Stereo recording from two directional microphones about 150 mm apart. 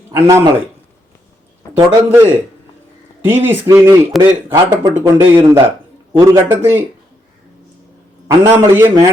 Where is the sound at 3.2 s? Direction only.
15° right (ahead or behind).